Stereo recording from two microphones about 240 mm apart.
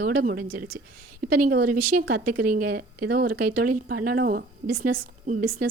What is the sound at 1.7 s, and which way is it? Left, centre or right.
Speech, right.